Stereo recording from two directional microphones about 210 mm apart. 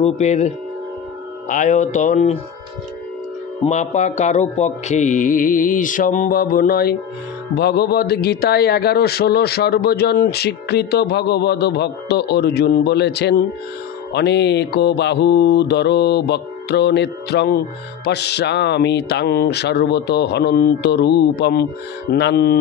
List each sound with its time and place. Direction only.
0.0 s mantra: 35° left (ahead or behind)
1.5 s mantra: 35° left (ahead or behind)
3.6 s mantra: 35° left (ahead or behind); by 22.6 s 50° left (ahead or behind)